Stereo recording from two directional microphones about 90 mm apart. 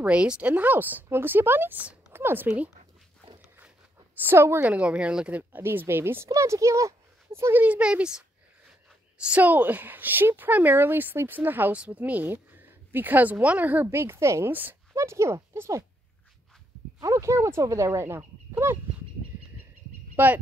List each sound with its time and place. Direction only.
0.0 s a woman's voice: 15° right (ahead or behind)
2.0 s a sound: 25° right (ahead or behind)
4.2 s a woman's voice: 25° right (ahead or behind)
4.7 s speech: 15° right (ahead or behind)
5.6 s speech: 25° right (ahead or behind)
7.6 s speech: 15° right (ahead or behind)
9.2 s a woman's voice: 15° right (ahead or behind)
15.0 s speech: 30° right (ahead or behind)
17.0 s speech: 35° right (ahead or behind)
20.2 s a woman's voice: 25° right (ahead or behind)